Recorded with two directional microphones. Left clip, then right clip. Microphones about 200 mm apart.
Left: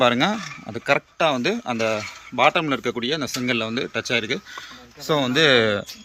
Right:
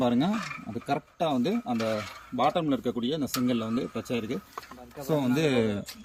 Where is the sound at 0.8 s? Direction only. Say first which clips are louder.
Left 10 dB; centre (ahead or behind).